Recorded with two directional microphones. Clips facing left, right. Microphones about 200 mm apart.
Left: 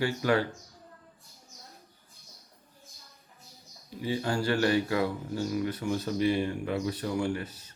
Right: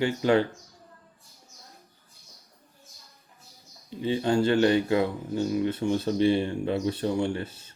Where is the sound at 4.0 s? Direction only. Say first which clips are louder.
Right 6 dB; 25° right (ahead or behind).